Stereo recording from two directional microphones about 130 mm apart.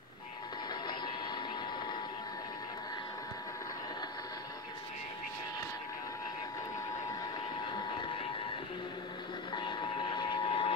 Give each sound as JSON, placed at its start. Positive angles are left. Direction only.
{"t": 0.8, "sound": "vehicle", "side_deg": 35}
{"t": 9.5, "sound": "vehicle", "side_deg": 35}